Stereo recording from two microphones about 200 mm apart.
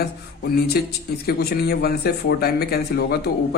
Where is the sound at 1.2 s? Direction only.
50° left (ahead or behind).